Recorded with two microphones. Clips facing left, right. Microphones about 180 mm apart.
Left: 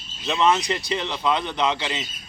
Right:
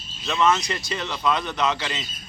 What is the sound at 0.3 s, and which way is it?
Speech, 25° left (ahead or behind).